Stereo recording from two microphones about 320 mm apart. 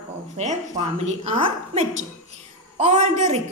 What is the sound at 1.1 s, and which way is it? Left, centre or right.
A woman's voice, centre.